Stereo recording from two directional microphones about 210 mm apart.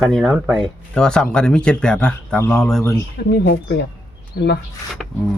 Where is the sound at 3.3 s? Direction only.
55° left (ahead or behind).